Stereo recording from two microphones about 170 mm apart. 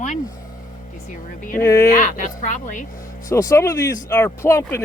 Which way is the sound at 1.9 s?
50° left (ahead or behind).